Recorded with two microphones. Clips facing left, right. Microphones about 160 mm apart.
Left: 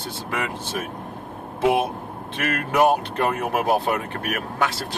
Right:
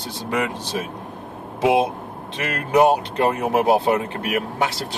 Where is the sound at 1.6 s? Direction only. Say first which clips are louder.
Right 2 dB; 15° right (ahead or behind).